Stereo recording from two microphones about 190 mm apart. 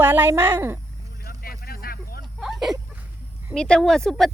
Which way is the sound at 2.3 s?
Centre (ahead or behind).